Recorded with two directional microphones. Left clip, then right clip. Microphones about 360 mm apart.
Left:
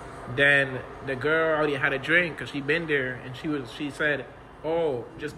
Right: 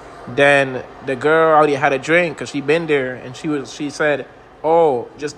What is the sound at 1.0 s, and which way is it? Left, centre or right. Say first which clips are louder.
A man's voice: right 10 dB; centre.